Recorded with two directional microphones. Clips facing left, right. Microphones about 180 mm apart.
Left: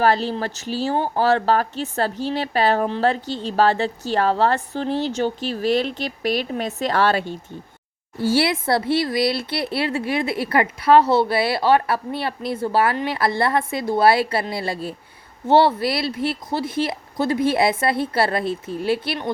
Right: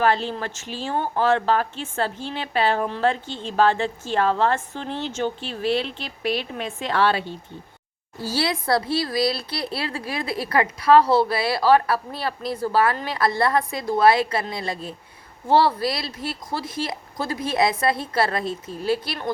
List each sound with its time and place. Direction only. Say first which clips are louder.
0.0 s speech: left 2 dB; 40° left (ahead or behind)
8.2 s a woman's voice: left 6 dB; 25° left (ahead or behind)